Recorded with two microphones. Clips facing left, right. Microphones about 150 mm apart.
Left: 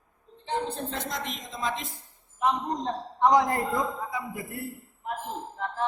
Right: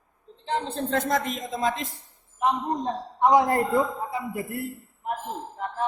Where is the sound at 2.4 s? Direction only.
20° right (ahead or behind).